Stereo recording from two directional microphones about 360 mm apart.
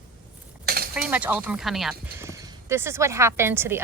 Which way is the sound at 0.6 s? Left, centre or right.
Right.